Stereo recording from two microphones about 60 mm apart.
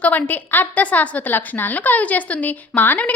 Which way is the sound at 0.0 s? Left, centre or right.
Left.